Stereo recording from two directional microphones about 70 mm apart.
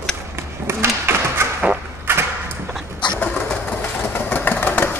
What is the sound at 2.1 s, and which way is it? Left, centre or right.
Mechanisms, right.